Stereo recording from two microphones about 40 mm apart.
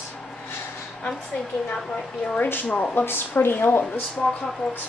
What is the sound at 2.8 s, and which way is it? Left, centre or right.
Speech, left.